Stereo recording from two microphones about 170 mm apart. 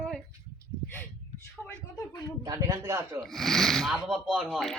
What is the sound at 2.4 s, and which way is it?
Speech, 20° right (ahead or behind).